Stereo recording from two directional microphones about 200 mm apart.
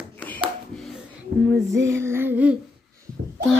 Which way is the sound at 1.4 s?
10° right (ahead or behind).